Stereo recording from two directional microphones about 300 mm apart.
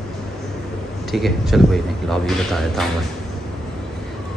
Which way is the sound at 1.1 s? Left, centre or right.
Centre.